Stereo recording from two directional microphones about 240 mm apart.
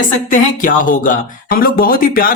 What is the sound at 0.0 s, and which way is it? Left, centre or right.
Speech, left.